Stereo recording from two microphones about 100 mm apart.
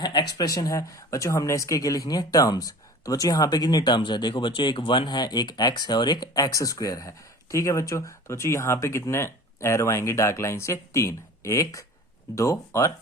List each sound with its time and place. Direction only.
0.0 s speech: 45° left (ahead or behind)